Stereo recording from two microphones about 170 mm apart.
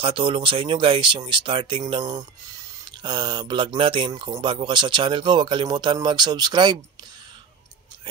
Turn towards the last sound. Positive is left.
turn(degrees=-25)  # may be behind; listen again after turning